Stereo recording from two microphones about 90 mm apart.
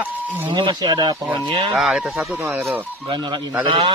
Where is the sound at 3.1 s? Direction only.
60° right (ahead or behind).